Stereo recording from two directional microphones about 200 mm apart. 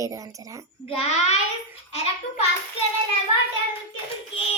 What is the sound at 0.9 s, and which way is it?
Speech, 30° left (ahead or behind).